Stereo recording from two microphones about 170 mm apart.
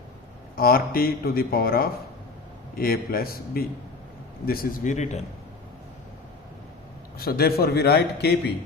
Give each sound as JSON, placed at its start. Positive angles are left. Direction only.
{"t": 0.5, "sound": "a man's voice", "side_deg": 60}
{"t": 7.2, "sound": "a man's voice", "side_deg": 65}